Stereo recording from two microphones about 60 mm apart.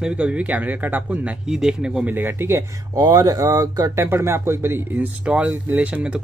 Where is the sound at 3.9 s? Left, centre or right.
Right.